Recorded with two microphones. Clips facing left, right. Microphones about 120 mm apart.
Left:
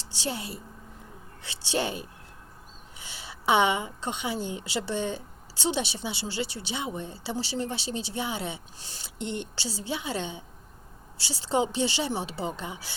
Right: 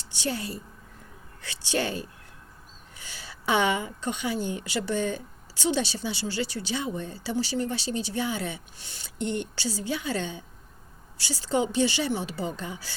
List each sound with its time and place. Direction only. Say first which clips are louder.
0.2 s a woman's voice: right 2 dB; 25° left (ahead or behind)
8.8 s speech: left 1 dB; 35° left (ahead or behind)
9.1 s a woman's voice: right 4 dB; 20° left (ahead or behind)